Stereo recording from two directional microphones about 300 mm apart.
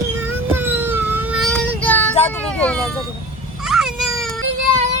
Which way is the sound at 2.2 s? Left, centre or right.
Centre.